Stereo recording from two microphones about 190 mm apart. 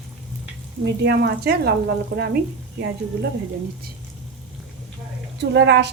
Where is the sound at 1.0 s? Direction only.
60° right (ahead or behind).